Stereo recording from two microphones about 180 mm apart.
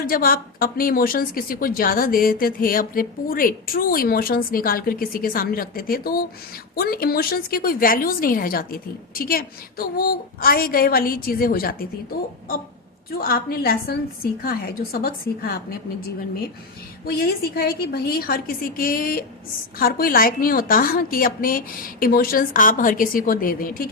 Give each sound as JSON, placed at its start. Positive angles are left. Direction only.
{"t": 0.0, "sound": "a woman's voice", "side_deg": 55}
{"t": 13.1, "sound": "a woman's voice", "side_deg": 55}
{"t": 17.1, "sound": "a woman's voice", "side_deg": 55}